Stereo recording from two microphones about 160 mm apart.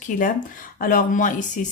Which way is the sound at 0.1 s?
60° left (ahead or behind).